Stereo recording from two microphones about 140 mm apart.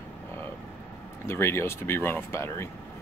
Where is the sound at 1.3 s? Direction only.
15° left (ahead or behind).